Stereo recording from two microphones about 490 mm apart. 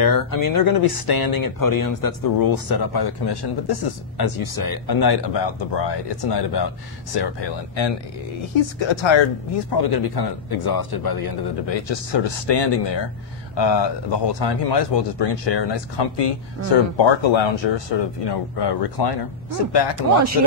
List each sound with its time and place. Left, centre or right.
0.0 s speech: left